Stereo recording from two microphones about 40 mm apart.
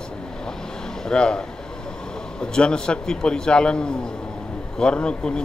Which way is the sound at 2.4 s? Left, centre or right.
Left.